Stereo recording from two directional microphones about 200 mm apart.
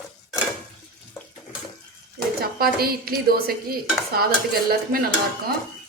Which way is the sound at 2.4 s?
50° right (ahead or behind).